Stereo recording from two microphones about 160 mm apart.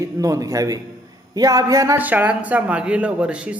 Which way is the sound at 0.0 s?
20° right (ahead or behind).